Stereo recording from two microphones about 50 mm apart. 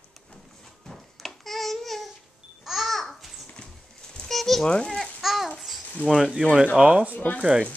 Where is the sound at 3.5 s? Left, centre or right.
Centre.